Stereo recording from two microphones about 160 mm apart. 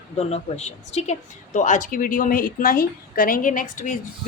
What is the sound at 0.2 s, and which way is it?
A woman's voice, 45° left (ahead or behind).